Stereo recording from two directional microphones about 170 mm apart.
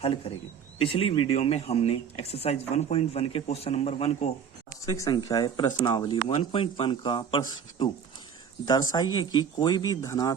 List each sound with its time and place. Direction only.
0.0 s speech: 35° left (ahead or behind)
4.9 s speech: 20° left (ahead or behind)